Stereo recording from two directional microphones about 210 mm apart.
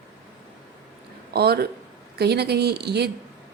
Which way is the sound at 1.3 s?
50° right (ahead or behind).